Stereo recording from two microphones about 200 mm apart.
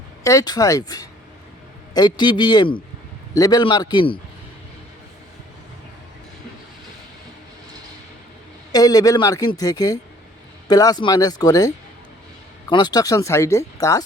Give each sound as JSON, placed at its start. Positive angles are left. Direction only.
{"t": 0.3, "sound": "speech", "side_deg": 20}
{"t": 8.7, "sound": "speech", "side_deg": 20}